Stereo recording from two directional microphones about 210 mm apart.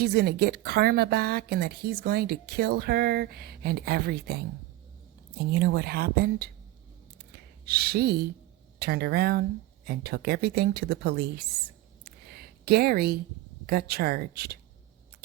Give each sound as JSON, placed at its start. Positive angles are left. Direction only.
{"t": 0.0, "sound": "speech", "side_deg": -50}
{"t": 7.6, "sound": "speech", "side_deg": -45}
{"t": 12.0, "sound": "a sound", "side_deg": -50}
{"t": 13.7, "sound": "speech", "side_deg": -50}